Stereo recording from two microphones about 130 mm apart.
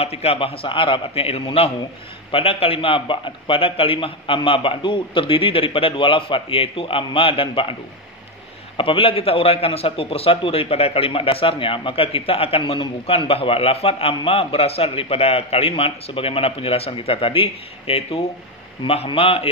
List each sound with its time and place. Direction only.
0.0 s a man's voice: 50° left (ahead or behind)
8.7 s a man's voice: 45° left (ahead or behind)